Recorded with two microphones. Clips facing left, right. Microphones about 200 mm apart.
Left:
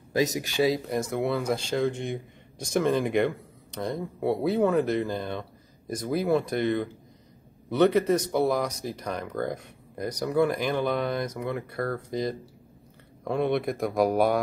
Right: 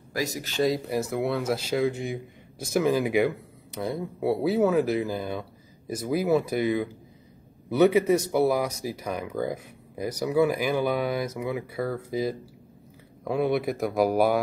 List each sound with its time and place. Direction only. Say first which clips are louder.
0.1 s speech: left 5 dB; 20° left (ahead or behind)
0.6 s speech: even; centre (ahead or behind)